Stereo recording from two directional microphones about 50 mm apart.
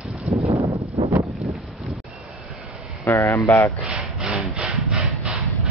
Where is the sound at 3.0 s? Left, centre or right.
Left.